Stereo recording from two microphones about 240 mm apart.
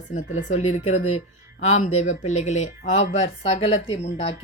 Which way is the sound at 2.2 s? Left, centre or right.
Left.